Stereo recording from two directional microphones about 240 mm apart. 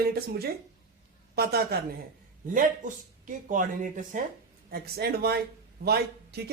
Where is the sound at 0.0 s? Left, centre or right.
Right.